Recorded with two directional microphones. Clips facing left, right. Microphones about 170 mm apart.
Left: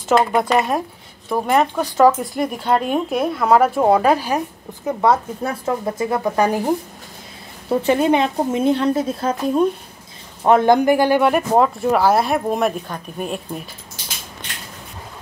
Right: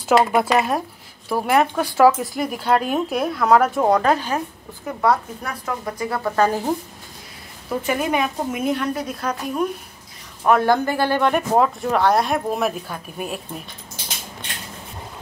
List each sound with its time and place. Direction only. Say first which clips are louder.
0.1 s a woman's voice: left 1 dB; 10° right (ahead or behind); by 4.4 s 10° left (ahead or behind)
4.8 s a woman's voice: left 3 dB; 20° left (ahead or behind)
7.7 s a woman's voice: left 6 dB; 30° left (ahead or behind); by 13.4 s 5° right (ahead or behind)